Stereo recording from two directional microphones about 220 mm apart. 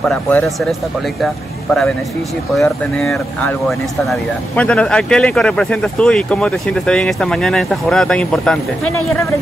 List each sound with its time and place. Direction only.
0.0 s speech: 5° left (ahead or behind)